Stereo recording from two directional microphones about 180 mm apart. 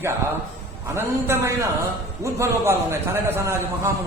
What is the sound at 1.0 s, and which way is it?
A man's voice, 15° right (ahead or behind).